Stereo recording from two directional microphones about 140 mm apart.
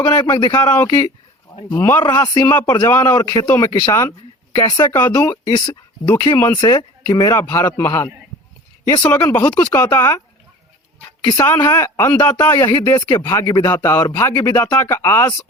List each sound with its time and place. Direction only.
0.1 s speech: 30° left (ahead or behind)
0.5 s speech: 15° left (ahead or behind)
4.9 s speech: 20° left (ahead or behind)
11.3 s speech: 25° left (ahead or behind)